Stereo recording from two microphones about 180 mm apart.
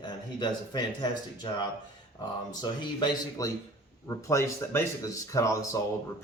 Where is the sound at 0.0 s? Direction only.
25° left (ahead or behind).